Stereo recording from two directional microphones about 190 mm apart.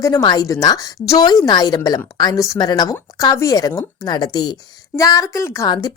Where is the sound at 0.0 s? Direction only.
20° left (ahead or behind).